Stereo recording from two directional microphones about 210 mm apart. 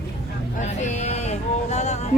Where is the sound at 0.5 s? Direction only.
35° left (ahead or behind).